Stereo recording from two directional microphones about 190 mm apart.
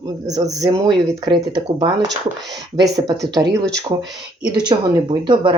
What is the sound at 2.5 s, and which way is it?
Speech, 20° right (ahead or behind).